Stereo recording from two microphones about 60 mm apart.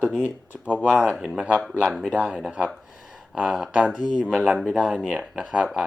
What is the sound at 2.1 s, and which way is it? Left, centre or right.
Speech, centre.